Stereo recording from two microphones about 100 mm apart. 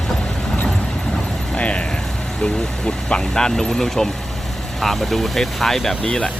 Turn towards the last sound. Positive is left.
turn(degrees=10)  # may be behind; listen again after turning